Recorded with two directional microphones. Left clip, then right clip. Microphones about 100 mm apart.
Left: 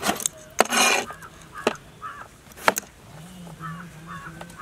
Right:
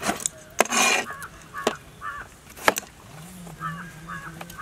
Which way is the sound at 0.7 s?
20° left (ahead or behind).